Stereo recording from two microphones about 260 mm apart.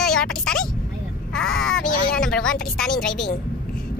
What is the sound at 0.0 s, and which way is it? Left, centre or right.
Vehicle, centre.